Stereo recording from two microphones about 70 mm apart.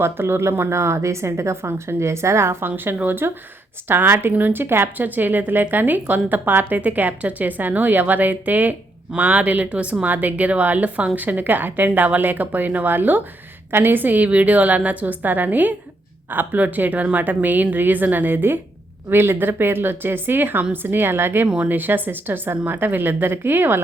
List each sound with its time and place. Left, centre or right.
0.0 s a woman's voice: right
21.4 s a woman's voice: centre